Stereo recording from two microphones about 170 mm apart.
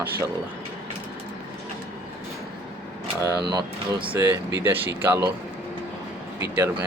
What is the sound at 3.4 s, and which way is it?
Speech, 25° right (ahead or behind).